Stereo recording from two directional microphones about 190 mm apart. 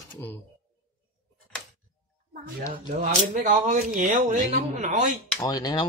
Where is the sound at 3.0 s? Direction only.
45° right (ahead or behind).